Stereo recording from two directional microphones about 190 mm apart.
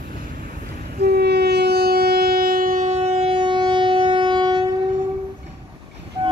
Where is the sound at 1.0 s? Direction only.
60° right (ahead or behind); by 4.6 s 25° right (ahead or behind).